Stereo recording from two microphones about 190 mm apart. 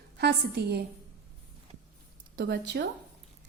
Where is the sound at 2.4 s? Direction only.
55° right (ahead or behind).